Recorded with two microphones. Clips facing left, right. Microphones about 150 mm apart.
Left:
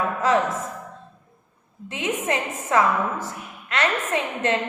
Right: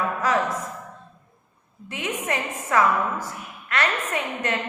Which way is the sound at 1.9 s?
25° left (ahead or behind).